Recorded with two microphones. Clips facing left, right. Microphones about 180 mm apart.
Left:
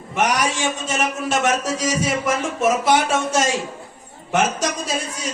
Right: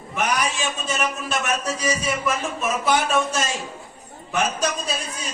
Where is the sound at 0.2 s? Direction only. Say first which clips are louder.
Left 4 dB; 85° left.